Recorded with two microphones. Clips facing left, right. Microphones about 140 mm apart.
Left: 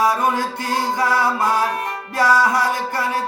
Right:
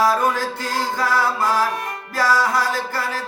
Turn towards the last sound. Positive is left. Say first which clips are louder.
# left 3 dB
turn(degrees=20)  # may be behind; listen again after turning